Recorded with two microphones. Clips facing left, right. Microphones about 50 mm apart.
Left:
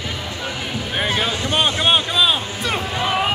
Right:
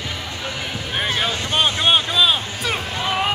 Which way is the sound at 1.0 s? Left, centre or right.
Centre.